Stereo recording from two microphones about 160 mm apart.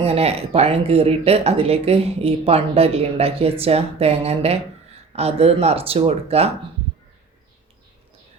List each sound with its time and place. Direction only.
0.0 s speech: 40° right (ahead or behind)